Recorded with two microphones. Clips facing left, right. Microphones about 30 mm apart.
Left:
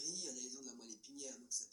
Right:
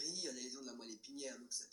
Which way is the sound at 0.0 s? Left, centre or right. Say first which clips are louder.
Right 2 dB; right.